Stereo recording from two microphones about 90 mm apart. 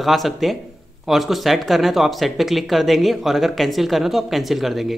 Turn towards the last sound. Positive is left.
turn(degrees=0)  # may be behind; listen again after turning